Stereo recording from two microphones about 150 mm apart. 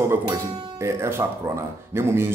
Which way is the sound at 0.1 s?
15° right (ahead or behind).